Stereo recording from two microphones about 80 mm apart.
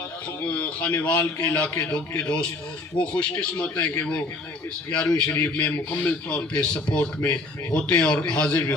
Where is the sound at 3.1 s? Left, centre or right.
Centre.